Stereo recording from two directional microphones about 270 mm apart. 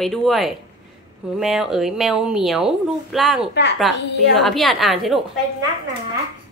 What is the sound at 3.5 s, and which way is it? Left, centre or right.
Speech, left.